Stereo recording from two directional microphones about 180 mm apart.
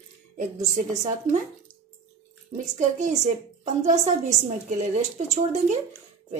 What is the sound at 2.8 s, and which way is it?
A woman's voice, 40° right (ahead or behind).